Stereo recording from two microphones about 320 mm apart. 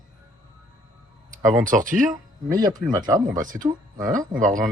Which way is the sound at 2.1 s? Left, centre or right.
Centre.